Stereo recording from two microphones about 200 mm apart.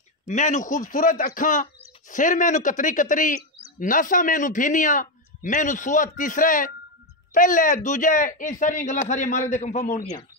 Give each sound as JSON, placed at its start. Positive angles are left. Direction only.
{"t": 0.3, "sound": "a man's voice", "side_deg": 35}